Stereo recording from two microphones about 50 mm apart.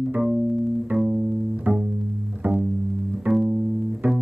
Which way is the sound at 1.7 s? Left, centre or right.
Centre.